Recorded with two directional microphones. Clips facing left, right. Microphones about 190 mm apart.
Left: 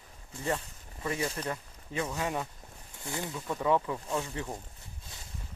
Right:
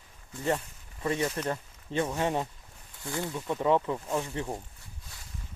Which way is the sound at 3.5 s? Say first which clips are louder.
Right 2 dB; 20° right (ahead or behind).